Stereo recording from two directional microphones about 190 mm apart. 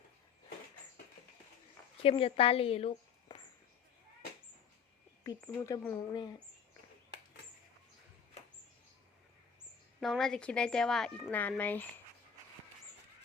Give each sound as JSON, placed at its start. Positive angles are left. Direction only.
{"t": 2.0, "sound": "a woman's voice", "side_deg": 30}
{"t": 5.2, "sound": "speech", "side_deg": 20}
{"t": 10.0, "sound": "speech", "side_deg": 0}